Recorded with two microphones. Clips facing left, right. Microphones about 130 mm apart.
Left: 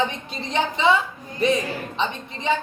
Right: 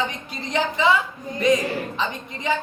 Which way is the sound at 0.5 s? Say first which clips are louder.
Even; 25° left (ahead or behind).